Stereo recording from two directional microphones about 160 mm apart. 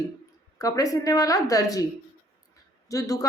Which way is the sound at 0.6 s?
20° left (ahead or behind).